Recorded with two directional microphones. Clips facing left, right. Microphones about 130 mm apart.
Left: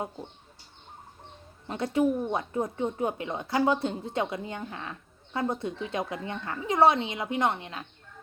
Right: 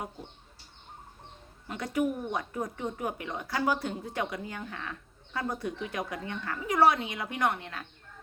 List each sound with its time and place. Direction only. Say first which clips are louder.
1.6 s speech: left 4 dB; 25° left (ahead or behind)